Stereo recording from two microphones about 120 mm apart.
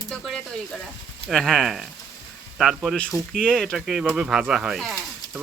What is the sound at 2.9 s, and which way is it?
Speech, 10° left (ahead or behind).